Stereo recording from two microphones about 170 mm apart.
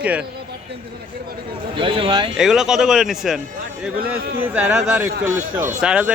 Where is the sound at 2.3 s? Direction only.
Centre (ahead or behind).